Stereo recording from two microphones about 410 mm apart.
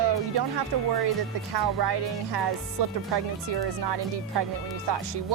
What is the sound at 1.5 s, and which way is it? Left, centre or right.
Speech, right.